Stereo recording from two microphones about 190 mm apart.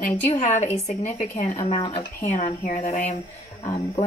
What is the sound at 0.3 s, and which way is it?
A woman's voice, 40° left (ahead or behind).